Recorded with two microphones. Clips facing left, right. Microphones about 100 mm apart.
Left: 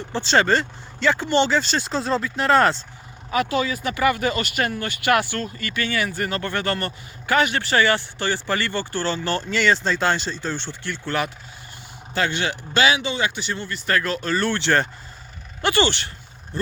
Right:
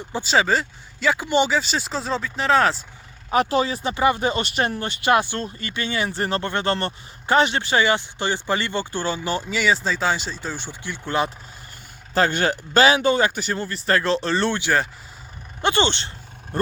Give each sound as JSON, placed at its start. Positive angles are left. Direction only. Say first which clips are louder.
{"t": 0.1, "sound": "speech", "louder": "left 1 dB", "side_deg": -10}
{"t": 3.3, "sound": "speech", "louder": "right 2 dB", "side_deg": -35}
{"t": 12.1, "sound": "speech", "louder": "right 4 dB", "side_deg": -40}
{"t": 14.6, "sound": "speech", "louder": "left 1 dB", "side_deg": -5}
{"t": 15.6, "sound": "speech", "louder": "even", "side_deg": -20}